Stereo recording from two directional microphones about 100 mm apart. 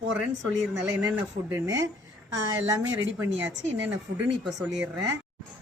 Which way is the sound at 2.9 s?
25° right (ahead or behind).